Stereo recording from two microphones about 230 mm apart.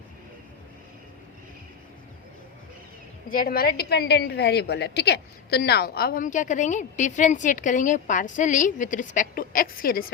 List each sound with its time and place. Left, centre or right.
3.2 s a woman's voice: left